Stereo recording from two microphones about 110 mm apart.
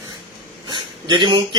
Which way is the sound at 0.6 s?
45° right (ahead or behind).